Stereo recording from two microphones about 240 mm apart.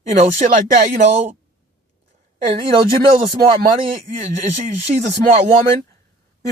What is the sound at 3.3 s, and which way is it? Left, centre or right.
Speech, right.